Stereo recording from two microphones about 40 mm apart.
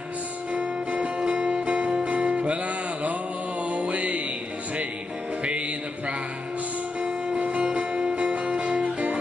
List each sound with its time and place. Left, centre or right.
0.5 s music: right
7.3 s music: right